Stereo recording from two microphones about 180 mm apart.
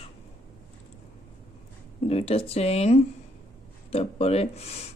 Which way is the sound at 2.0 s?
35° left (ahead or behind).